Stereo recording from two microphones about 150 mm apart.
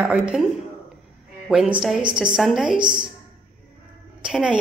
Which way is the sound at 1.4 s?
5° right (ahead or behind).